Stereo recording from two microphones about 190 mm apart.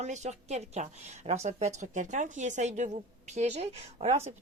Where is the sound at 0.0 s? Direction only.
35° right (ahead or behind).